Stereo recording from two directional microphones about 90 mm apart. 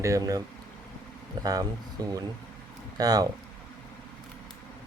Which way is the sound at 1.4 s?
45° right (ahead or behind).